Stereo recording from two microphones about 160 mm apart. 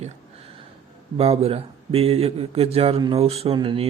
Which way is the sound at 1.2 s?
40° right (ahead or behind).